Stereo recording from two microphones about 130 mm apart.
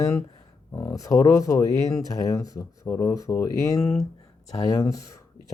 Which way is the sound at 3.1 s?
25° left (ahead or behind).